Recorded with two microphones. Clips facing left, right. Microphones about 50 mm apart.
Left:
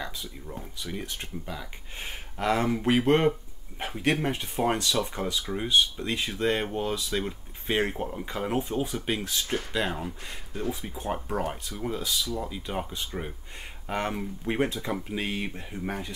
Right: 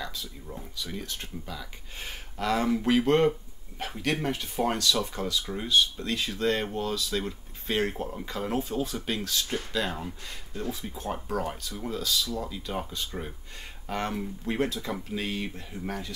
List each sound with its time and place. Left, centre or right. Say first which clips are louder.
0.7 s speech: left 1 dB; left